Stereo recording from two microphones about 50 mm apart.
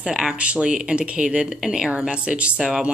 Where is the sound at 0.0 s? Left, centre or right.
Centre.